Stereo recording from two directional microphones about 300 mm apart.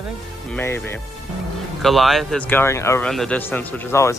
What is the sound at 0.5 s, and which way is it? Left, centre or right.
Speech, centre.